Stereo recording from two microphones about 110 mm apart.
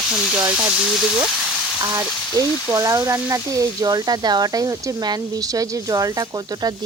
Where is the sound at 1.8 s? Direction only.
30° right (ahead or behind).